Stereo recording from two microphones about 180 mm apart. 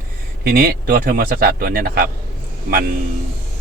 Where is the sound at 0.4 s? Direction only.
55° right (ahead or behind).